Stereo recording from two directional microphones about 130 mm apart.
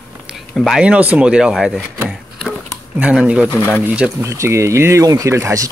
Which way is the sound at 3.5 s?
20° left (ahead or behind).